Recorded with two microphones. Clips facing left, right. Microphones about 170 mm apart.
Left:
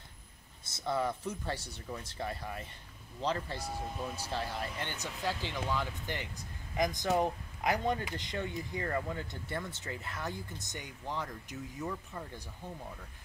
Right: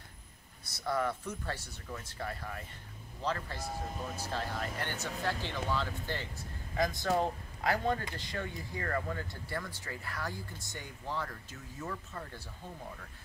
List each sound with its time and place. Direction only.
0.7 s speech: 25° left (ahead or behind)